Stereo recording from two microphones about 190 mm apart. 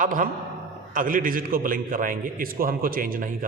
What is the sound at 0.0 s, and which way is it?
A man's voice, 45° right (ahead or behind).